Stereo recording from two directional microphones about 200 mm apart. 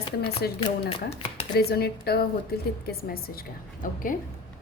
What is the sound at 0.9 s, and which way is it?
Speech, 25° left (ahead or behind).